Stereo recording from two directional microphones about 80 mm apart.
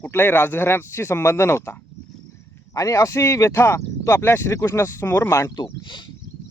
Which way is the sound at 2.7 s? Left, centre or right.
Left.